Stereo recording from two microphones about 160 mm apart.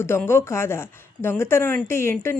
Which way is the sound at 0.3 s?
15° left (ahead or behind).